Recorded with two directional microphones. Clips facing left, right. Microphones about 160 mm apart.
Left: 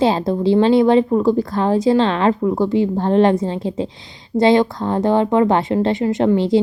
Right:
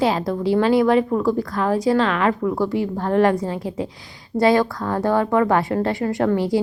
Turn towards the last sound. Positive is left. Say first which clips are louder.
# left 4 dB
turn(degrees=25)  # may be behind; listen again after turning